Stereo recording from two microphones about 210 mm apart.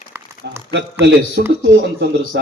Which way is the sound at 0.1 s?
10° right (ahead or behind).